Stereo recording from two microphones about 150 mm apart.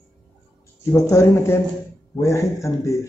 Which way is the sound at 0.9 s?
20° left (ahead or behind).